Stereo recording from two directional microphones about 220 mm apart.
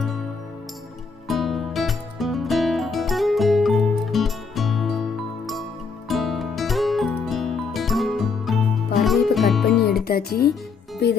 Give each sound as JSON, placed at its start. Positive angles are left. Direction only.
{"t": 1.3, "sound": "music", "side_deg": 0}
{"t": 6.1, "sound": "music", "side_deg": 0}
{"t": 10.0, "sound": "music", "side_deg": 45}